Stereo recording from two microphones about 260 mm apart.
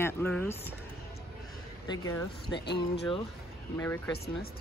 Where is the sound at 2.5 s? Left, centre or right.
Left.